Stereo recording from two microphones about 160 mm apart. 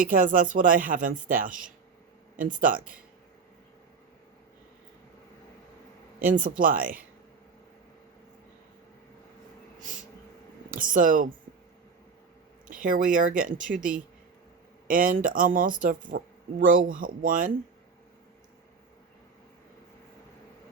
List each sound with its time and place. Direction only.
0.0 s speech: 60° right (ahead or behind)
6.1 s speech: 60° right (ahead or behind)
10.7 s speech: 55° right (ahead or behind)
12.6 s speech: 55° right (ahead or behind)